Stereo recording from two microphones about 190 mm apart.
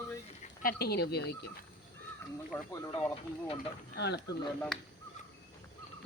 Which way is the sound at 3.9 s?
60° left (ahead or behind).